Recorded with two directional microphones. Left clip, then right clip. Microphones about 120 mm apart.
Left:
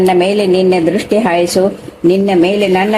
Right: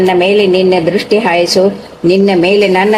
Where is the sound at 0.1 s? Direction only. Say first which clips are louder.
Right 2 dB; 40° left (ahead or behind).